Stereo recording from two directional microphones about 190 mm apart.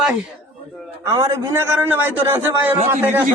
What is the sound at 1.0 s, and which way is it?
A man's voice, 20° right (ahead or behind).